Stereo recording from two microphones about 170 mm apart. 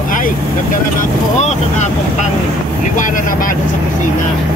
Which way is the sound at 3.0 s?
50° left (ahead or behind).